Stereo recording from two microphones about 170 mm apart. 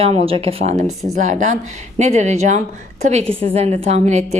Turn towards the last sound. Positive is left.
turn(degrees=-40)  # may be behind; listen again after turning